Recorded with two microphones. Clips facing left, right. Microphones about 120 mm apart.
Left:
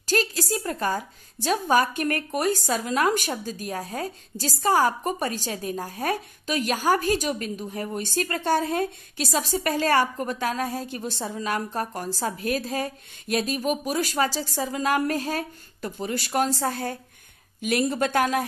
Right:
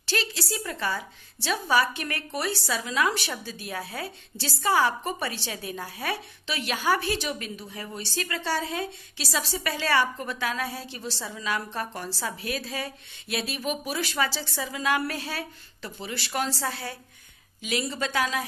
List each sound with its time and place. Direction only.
0.0 s a woman's voice: 45° left (ahead or behind)